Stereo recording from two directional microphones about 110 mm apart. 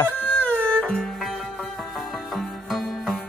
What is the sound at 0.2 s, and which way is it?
Music, 15° left (ahead or behind).